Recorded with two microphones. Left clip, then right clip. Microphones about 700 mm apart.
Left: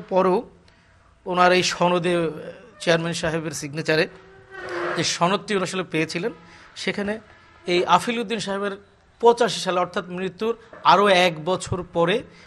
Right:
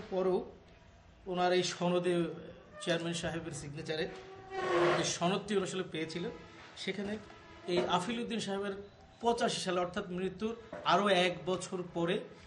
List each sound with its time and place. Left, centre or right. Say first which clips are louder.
0.1 s a man's voice: left 13 dB; left